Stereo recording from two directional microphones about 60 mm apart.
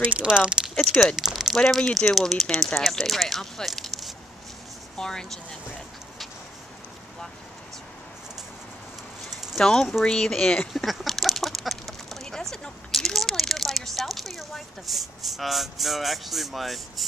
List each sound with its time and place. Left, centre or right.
0.0 s speech: right
0.9 s speech: centre
1.8 s speech: centre
2.0 s speech: centre
9.6 s speech: centre